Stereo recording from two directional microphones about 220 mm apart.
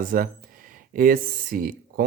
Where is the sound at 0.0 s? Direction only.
40° right (ahead or behind).